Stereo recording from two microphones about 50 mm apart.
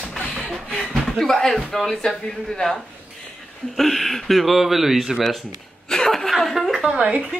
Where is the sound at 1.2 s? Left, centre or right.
Centre.